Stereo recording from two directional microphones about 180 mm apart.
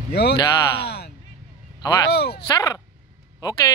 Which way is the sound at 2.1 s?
65° left (ahead or behind).